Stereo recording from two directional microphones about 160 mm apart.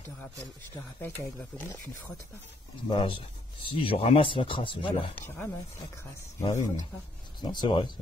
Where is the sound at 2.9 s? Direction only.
35° left (ahead or behind).